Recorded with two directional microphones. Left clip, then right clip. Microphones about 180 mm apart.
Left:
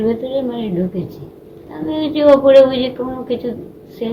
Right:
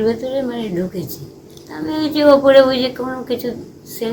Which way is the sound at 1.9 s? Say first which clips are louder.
Left 1 dB; 15° right (ahead or behind).